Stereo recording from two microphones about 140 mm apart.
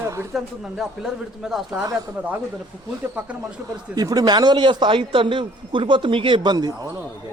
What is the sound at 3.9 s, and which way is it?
Speech, 25° right (ahead or behind).